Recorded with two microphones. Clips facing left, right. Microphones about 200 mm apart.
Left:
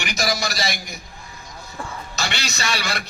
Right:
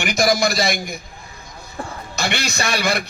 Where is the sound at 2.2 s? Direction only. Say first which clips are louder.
Right 5 dB; 55° right (ahead or behind).